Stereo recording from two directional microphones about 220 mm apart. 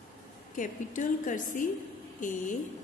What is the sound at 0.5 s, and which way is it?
A woman's voice, 35° left (ahead or behind).